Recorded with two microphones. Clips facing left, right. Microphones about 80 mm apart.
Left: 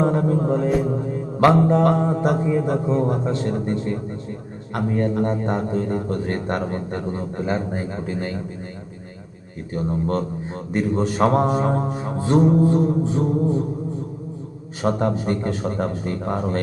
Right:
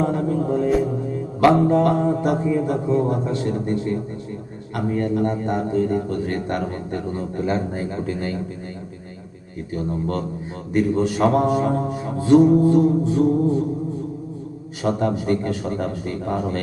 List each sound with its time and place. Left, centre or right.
0.0 s music: left
1.4 s a man's voice: left
4.7 s a man's voice: left
9.7 s a man's voice: left
14.8 s a man's voice: left